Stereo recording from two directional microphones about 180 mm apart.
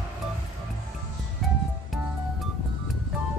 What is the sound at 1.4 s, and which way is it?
Music, centre (ahead or behind).